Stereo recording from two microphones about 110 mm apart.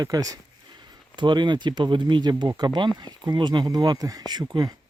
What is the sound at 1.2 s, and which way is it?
Speech, 45° right (ahead or behind).